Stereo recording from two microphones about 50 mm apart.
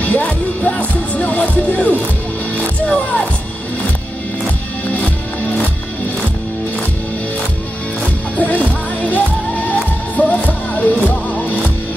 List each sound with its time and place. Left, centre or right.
0.0 s music: left
2.9 s speech: left
4.9 s music: left
8.4 s music: left